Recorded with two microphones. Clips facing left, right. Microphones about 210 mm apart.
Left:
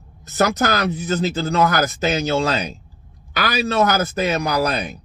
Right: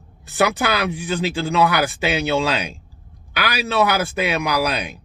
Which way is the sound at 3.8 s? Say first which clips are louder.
Even; 40° left (ahead or behind).